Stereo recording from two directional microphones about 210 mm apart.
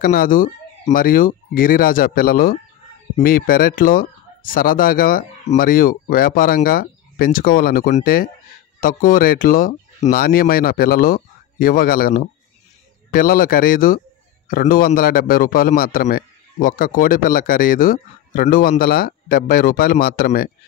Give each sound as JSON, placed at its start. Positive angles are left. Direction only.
{"t": 0.0, "sound": "a man's voice", "side_deg": 40}